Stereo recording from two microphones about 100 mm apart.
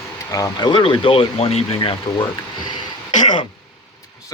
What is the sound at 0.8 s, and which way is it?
Speech, 65° left (ahead or behind).